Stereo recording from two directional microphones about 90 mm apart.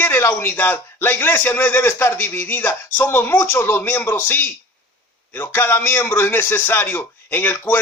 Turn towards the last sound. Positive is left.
turn(degrees=20)  # may be behind; listen again after turning